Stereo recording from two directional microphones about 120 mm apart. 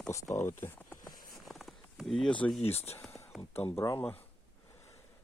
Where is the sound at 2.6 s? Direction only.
60° left (ahead or behind).